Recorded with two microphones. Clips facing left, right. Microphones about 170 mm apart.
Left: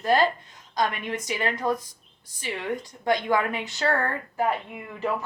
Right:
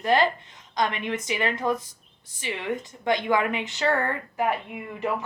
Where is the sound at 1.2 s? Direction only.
20° right (ahead or behind).